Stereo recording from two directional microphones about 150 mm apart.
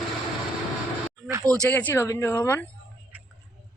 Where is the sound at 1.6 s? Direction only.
15° left (ahead or behind).